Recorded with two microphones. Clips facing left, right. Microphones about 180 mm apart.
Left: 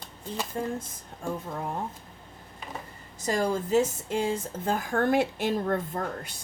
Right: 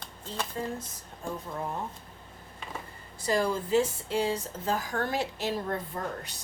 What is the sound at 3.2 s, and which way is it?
Speech, 45° left (ahead or behind).